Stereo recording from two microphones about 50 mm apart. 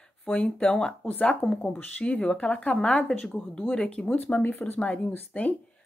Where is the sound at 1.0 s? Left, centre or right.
Left.